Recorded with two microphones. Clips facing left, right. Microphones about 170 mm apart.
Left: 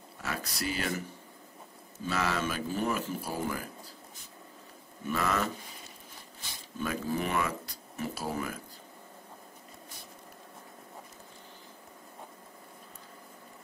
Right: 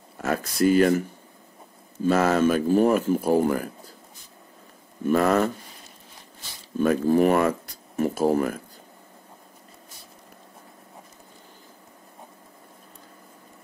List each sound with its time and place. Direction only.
0.2 s speech: 50° right (ahead or behind)
2.0 s speech: 45° right (ahead or behind)
5.0 s speech: 45° right (ahead or behind)
6.8 s speech: 50° right (ahead or behind)